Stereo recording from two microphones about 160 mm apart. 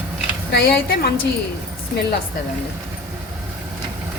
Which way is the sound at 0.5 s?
85° left.